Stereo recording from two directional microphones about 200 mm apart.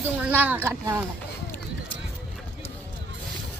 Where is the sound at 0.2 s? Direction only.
10° right (ahead or behind).